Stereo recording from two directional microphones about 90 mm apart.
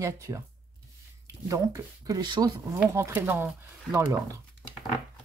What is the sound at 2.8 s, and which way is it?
Speech, 35° right (ahead or behind).